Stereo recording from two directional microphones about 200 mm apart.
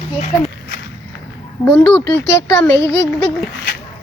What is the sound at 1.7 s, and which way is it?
Speech, 5° left (ahead or behind).